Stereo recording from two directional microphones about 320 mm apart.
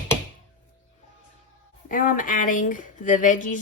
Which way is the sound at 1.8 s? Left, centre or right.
Left.